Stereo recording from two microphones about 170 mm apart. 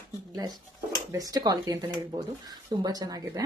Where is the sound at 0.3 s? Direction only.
25° right (ahead or behind).